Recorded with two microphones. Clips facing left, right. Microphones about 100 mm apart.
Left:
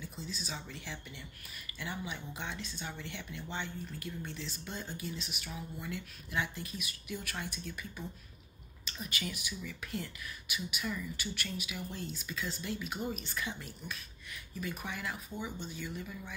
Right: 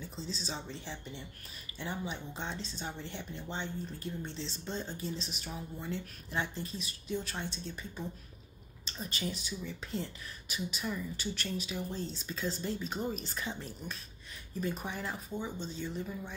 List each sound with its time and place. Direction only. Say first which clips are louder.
0.0 s speech: right 2 dB; 30° right (ahead or behind)
8.8 s speech: right 2 dB; 30° right (ahead or behind)